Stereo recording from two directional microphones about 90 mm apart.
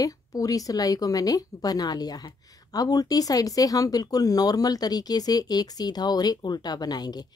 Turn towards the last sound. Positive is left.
turn(degrees=50)  # may be behind; listen again after turning